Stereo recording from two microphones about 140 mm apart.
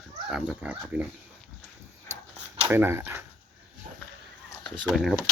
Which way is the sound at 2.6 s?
15° right (ahead or behind).